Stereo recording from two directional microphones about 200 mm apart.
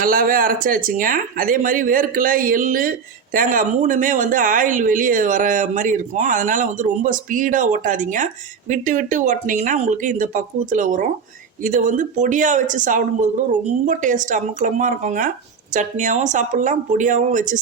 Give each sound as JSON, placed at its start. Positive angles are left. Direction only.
{"t": 0.0, "sound": "speech", "side_deg": -45}